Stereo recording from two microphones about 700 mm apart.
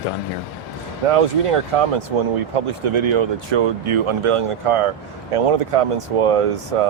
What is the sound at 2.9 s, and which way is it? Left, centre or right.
A man's voice, right.